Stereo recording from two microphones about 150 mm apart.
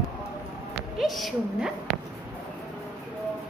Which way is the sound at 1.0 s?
Centre (ahead or behind).